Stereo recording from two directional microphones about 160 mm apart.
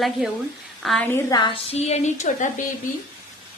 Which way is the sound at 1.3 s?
30° left (ahead or behind).